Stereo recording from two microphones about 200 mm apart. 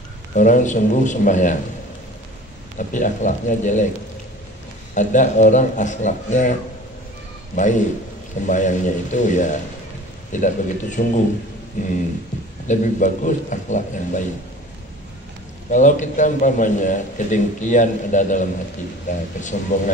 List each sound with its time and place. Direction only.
0.3 s a man's voice: 40° left (ahead or behind)
2.8 s a man's voice: 40° left (ahead or behind)
4.9 s a man's voice: 40° left (ahead or behind)
7.5 s a man's voice: 40° left (ahead or behind)
15.7 s a man's voice: 40° left (ahead or behind)
19.5 s a man's voice: 40° left (ahead or behind)